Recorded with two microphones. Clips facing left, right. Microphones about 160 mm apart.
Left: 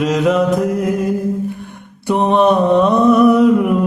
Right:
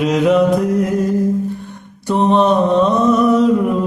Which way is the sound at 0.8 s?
55° left (ahead or behind).